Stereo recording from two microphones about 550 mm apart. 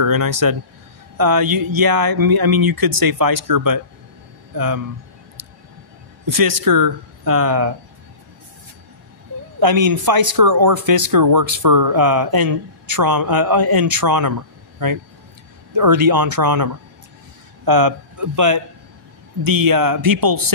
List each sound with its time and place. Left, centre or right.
0.0 s speech: right
5.4 s a sound: right
6.2 s speech: right
9.6 s speech: right
15.7 s speech: right